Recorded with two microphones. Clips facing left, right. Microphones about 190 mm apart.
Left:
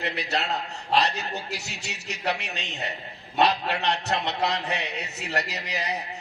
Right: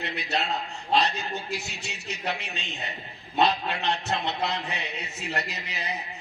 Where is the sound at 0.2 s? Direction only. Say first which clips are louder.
Right 3 dB; 70° left (ahead or behind).